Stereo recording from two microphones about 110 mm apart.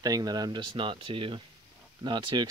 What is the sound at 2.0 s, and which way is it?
Speech, 45° right (ahead or behind).